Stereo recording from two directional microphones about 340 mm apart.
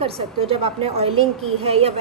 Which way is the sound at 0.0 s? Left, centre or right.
Centre.